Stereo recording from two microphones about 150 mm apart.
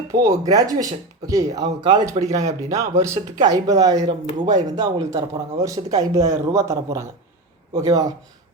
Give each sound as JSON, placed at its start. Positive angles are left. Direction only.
{"t": 0.1, "sound": "speech", "side_deg": -20}